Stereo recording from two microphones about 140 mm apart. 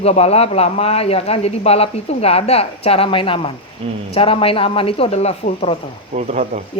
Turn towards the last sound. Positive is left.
turn(degrees=-60)  # may be behind; listen again after turning